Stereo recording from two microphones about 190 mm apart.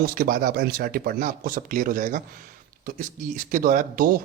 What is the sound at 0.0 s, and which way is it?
Speech, 50° right (ahead or behind).